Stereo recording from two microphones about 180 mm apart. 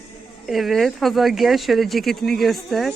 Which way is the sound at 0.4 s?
Centre (ahead or behind).